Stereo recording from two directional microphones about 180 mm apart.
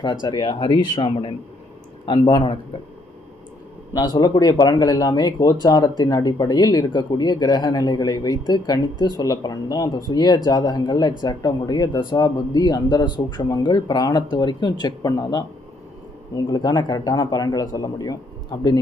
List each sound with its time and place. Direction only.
0.0 s speech: 25° left (ahead or behind)
3.9 s speech: 20° left (ahead or behind)
16.5 s speech: 20° left (ahead or behind)